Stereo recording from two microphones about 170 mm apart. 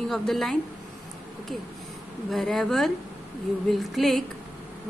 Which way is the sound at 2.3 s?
Centre (ahead or behind).